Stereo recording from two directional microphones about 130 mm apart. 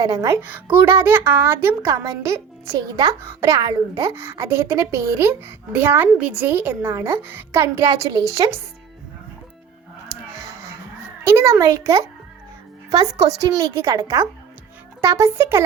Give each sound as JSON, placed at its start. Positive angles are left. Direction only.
{"t": 0.0, "sound": "a child's voice", "side_deg": -25}
{"t": 0.4, "sound": "a child's voice", "side_deg": -15}
{"t": 11.2, "sound": "a child's voice", "side_deg": -20}
{"t": 13.4, "sound": "a child's voice", "side_deg": -25}